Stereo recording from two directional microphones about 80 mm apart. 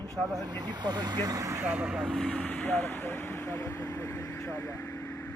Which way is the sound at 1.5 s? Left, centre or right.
Right.